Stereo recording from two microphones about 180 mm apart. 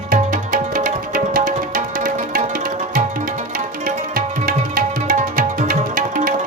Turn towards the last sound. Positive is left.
turn(degrees=-50)  # may be behind; listen again after turning